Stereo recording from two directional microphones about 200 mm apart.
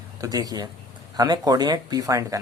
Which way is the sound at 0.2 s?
20° right (ahead or behind).